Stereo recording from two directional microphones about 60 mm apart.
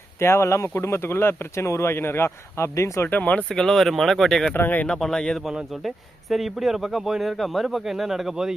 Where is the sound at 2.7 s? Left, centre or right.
Left.